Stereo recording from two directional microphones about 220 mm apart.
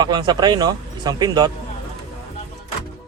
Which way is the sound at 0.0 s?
20° right (ahead or behind).